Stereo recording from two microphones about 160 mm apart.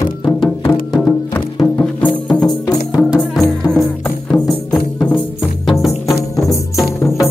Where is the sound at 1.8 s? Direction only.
10° left (ahead or behind).